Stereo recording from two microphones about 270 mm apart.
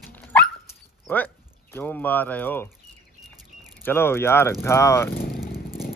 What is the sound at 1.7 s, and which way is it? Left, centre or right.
Speech, centre.